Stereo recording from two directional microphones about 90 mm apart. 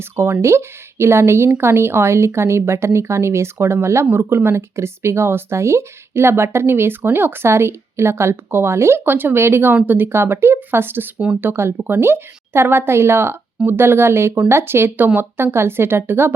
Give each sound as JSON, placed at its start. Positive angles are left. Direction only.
{"t": 0.0, "sound": "speech", "side_deg": -25}